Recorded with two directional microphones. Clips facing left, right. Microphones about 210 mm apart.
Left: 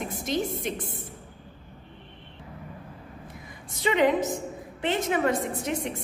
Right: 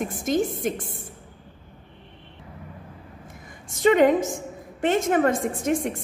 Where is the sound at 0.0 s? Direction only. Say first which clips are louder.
Right 5 dB; 50° right (ahead or behind).